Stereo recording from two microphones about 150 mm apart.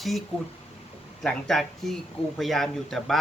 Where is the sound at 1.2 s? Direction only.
Centre (ahead or behind).